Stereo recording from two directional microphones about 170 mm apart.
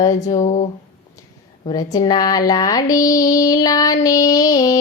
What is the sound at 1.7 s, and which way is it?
Child singing, 25° left (ahead or behind).